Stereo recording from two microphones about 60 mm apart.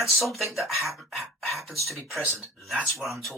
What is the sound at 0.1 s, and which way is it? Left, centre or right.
Speech, centre.